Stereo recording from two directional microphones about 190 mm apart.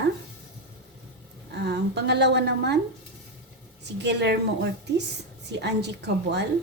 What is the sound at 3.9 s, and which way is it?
A woman's voice, 65° right (ahead or behind).